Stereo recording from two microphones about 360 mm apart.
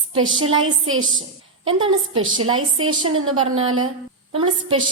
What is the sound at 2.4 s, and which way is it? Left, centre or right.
A woman's voice, right.